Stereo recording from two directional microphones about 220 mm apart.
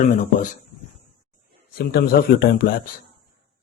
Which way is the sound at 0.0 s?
35° left (ahead or behind).